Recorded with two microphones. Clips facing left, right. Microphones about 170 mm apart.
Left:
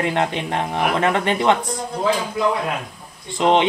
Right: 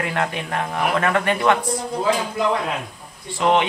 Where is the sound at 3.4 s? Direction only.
20° left (ahead or behind).